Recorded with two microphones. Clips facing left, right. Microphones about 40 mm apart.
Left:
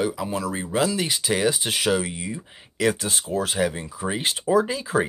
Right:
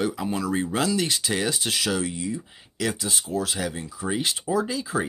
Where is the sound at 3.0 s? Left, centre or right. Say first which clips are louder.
Left 2 dB; left.